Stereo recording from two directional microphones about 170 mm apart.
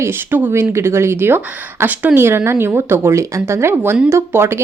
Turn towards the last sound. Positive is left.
turn(degrees=-15)  # may be behind; listen again after turning